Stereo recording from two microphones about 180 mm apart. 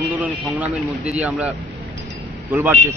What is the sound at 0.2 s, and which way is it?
Speech, 10° right (ahead or behind).